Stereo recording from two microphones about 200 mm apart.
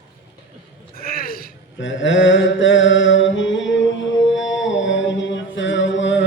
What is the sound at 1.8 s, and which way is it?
Mantra, 70° left (ahead or behind).